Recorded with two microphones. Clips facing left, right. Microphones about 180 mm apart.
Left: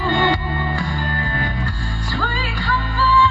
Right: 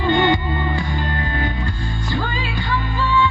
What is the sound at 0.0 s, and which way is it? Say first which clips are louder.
Music: right 2 dB; 20° right (ahead or behind).